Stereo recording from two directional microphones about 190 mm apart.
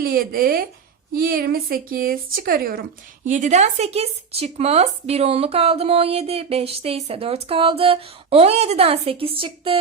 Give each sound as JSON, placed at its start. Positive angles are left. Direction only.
{"t": 0.0, "sound": "a woman's voice", "side_deg": -50}